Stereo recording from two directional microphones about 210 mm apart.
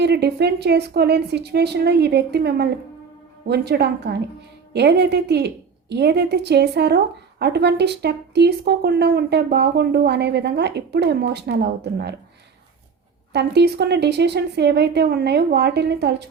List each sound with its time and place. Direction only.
0.0 s a woman's voice: 50° right (ahead or behind)
13.3 s a woman's voice: 55° right (ahead or behind)